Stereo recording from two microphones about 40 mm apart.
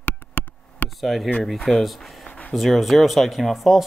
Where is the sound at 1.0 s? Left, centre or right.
Centre.